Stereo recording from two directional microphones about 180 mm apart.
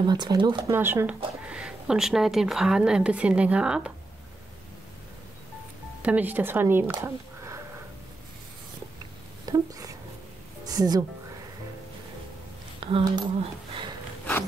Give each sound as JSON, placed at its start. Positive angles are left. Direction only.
{"t": 0.0, "sound": "speech", "side_deg": -25}
{"t": 0.7, "sound": "speech", "side_deg": -15}
{"t": 6.0, "sound": "speech", "side_deg": -10}
{"t": 6.9, "sound": "a sound", "side_deg": -15}
{"t": 9.5, "sound": "a sound", "side_deg": -20}
{"t": 10.6, "sound": "a woman's voice", "side_deg": -20}
{"t": 12.8, "sound": "speech", "side_deg": -25}